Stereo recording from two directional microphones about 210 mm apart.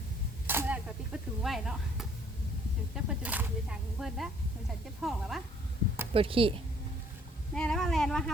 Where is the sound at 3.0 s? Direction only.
5° right (ahead or behind).